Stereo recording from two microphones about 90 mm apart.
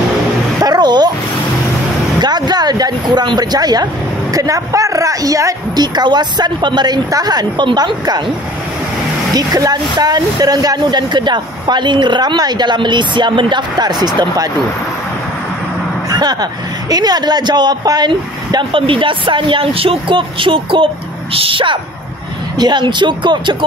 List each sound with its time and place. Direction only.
0.6 s a sound: 50° right (ahead or behind)
2.2 s speech: 50° right (ahead or behind)
9.3 s speech: 45° right (ahead or behind)
16.1 s a man's voice: 50° right (ahead or behind); by 21.7 s 75° right (ahead or behind)
22.6 s speech: 55° right (ahead or behind)